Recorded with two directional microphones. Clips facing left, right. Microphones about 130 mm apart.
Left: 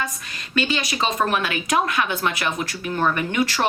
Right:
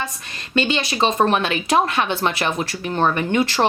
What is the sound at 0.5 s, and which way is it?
A woman's voice, 25° right (ahead or behind).